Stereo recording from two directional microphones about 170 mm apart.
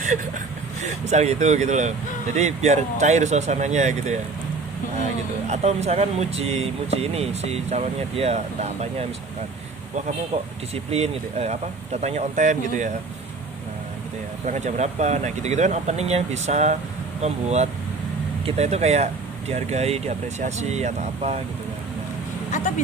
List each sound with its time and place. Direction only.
1.1 s speech: 40° right (ahead or behind)
5.5 s speech: 40° right (ahead or behind)
10.9 s speech: 40° right (ahead or behind)
14.4 s speech: 45° right (ahead or behind)